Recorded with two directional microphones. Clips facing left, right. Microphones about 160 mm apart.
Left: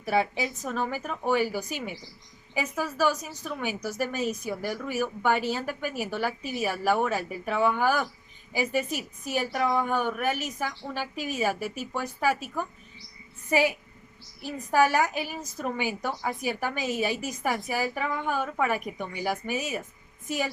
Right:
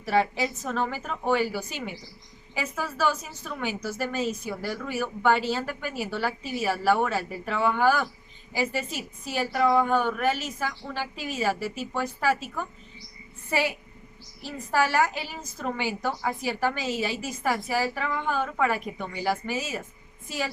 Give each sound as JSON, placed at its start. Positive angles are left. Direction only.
{"t": 0.0, "sound": "a woman's voice", "side_deg": 10}